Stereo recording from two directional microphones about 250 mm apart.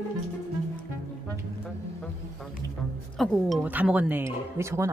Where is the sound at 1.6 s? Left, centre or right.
Centre.